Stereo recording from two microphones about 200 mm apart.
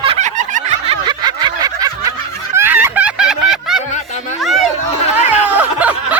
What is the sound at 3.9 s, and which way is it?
Music, 35° left (ahead or behind).